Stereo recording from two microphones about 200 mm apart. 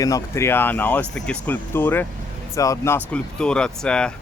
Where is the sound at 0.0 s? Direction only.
15° left (ahead or behind).